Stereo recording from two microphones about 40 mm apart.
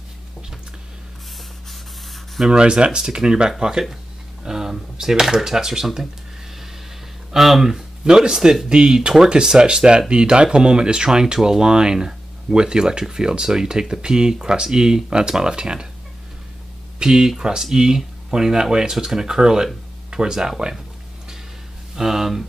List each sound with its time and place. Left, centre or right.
2.4 s speech: right
4.5 s a sound: centre
5.3 s speech: centre
7.3 s speech: centre
17.0 s speech: centre
21.9 s speech: centre